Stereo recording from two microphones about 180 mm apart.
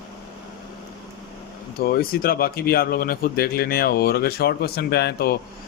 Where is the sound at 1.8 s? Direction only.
55° left (ahead or behind).